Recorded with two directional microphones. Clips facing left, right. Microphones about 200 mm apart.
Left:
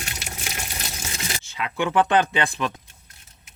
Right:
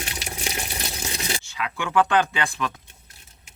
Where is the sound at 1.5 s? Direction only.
20° left (ahead or behind).